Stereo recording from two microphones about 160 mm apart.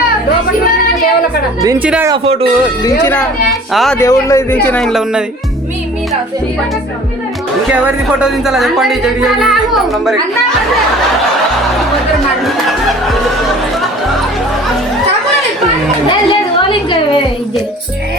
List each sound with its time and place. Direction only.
1.8 s speech: 10° right (ahead or behind)
3.7 s music: centre (ahead or behind)
3.9 s speech: 20° left (ahead or behind); by 5.2 s centre (ahead or behind)
7.7 s music: 5° right (ahead or behind)
16.6 s a sound: 30° left (ahead or behind)